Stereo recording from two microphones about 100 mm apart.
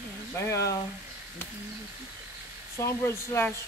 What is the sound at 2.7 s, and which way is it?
Speech, 30° left (ahead or behind).